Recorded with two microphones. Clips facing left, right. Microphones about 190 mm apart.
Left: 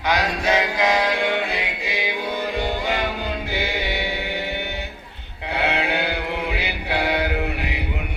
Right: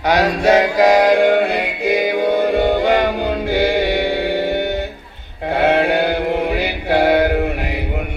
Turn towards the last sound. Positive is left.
turn(degrees=-50)  # may be behind; listen again after turning